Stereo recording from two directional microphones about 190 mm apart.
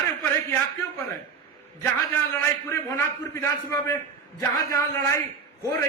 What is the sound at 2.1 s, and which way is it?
A man's voice, 15° left (ahead or behind).